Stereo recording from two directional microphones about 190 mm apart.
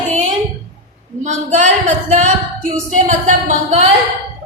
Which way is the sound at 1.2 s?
40° right (ahead or behind).